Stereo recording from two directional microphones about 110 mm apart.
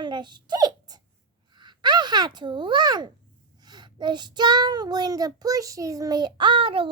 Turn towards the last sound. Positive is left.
turn(degrees=-50)  # may be behind; listen again after turning